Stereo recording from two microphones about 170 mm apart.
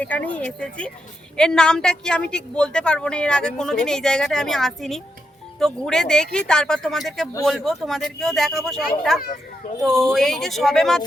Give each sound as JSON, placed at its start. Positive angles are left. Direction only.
{"t": 0.0, "sound": "a woman's voice", "side_deg": 10}
{"t": 9.2, "sound": "a child's voice", "side_deg": 55}
{"t": 9.8, "sound": "a woman's voice", "side_deg": 0}